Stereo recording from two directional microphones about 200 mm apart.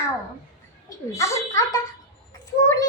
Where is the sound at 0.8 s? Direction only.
15° left (ahead or behind).